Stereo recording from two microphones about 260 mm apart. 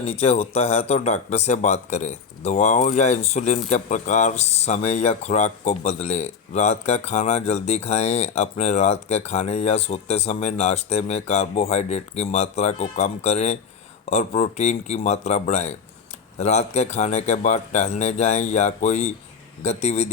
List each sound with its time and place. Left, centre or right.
0.0 s speech: left